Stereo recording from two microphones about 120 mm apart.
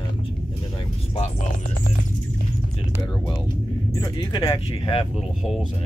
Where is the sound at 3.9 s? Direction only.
35° left (ahead or behind).